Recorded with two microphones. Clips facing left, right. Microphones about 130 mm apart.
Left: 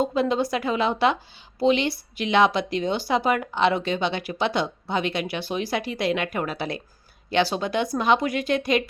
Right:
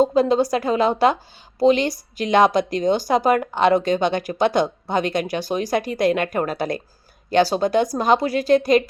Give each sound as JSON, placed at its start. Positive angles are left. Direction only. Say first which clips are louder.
{"t": 0.0, "sound": "a woman's voice", "louder": "right 6 dB", "side_deg": -40}